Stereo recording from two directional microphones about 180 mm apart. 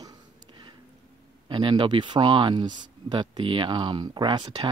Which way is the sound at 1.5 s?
25° right (ahead or behind).